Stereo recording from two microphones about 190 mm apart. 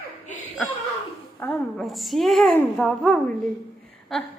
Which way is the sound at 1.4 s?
10° left (ahead or behind).